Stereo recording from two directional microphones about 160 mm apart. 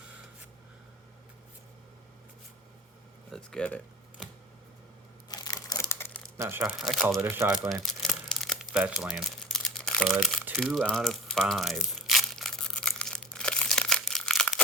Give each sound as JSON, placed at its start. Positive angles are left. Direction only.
{"t": 3.3, "sound": "speech", "side_deg": 5}
{"t": 5.3, "sound": "crumpling", "side_deg": 25}
{"t": 6.3, "sound": "speech", "side_deg": -15}
{"t": 6.6, "sound": "speech", "side_deg": 0}
{"t": 7.2, "sound": "speech", "side_deg": -15}
{"t": 8.0, "sound": "crumpling", "side_deg": 0}